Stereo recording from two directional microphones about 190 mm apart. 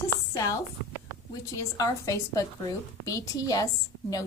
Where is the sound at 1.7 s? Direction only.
15° left (ahead or behind).